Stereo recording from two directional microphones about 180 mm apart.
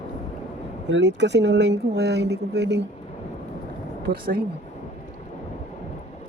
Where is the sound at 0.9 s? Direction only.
80° right.